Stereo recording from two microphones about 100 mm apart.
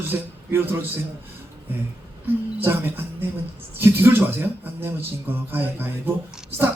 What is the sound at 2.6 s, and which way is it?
A man's voice, 20° right (ahead or behind).